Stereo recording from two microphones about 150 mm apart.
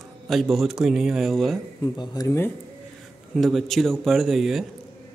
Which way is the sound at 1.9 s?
30° left (ahead or behind).